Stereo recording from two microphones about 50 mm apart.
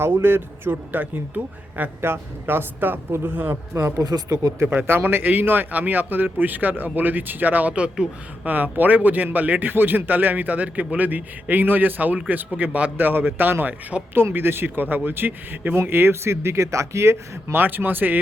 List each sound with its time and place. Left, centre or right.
0.0 s speech: right
2.0 s speech: right
3.5 s speech: right
4.6 s speech: right
8.4 s speech: right
17.5 s speech: right